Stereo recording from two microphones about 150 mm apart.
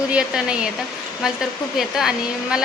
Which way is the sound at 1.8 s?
5° right (ahead or behind).